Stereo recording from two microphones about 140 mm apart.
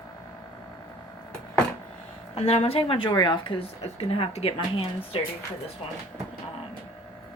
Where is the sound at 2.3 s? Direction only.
45° left (ahead or behind).